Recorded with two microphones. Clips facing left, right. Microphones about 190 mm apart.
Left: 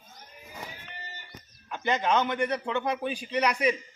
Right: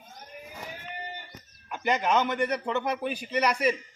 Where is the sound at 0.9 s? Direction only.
55° right (ahead or behind).